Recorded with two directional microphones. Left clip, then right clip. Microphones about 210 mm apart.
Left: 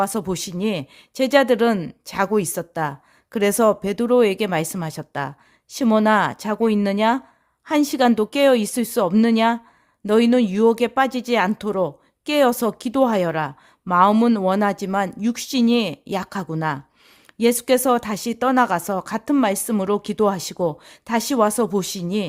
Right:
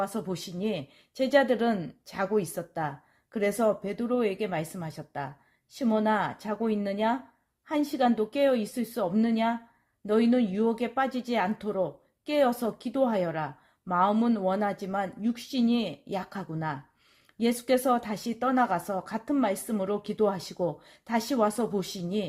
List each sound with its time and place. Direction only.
0.0 s speech: 40° left (ahead or behind)